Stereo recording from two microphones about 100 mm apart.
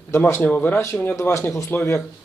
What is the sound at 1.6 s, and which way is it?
Speech, 20° left (ahead or behind).